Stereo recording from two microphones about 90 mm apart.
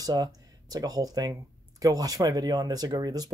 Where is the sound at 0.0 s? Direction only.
45° right (ahead or behind).